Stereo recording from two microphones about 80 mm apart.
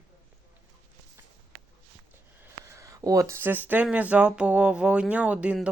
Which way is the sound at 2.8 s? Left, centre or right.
Right.